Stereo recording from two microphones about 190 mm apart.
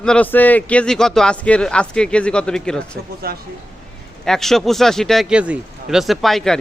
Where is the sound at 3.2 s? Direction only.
55° right (ahead or behind).